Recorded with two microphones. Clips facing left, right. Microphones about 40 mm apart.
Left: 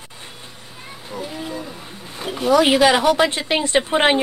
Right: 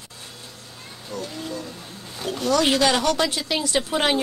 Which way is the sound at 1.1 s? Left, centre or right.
Centre.